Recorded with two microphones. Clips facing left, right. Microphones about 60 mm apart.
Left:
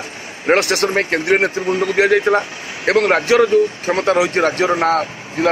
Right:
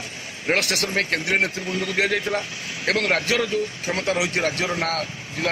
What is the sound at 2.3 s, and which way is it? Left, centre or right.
Speech, left.